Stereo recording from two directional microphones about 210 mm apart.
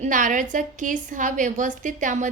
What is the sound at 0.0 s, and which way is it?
A woman's voice, 35° right (ahead or behind).